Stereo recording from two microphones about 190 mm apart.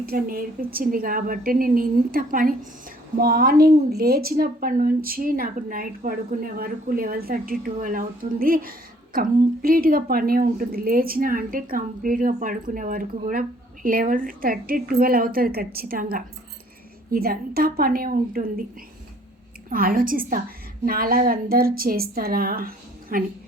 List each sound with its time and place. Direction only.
0.0 s a woman's voice: 50° right (ahead or behind)
19.7 s a woman's voice: 50° right (ahead or behind)